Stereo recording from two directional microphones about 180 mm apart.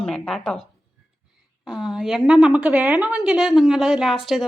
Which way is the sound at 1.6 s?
5° right (ahead or behind).